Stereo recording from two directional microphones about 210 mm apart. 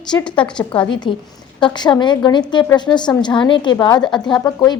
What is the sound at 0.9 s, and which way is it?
A woman's voice, 20° left (ahead or behind).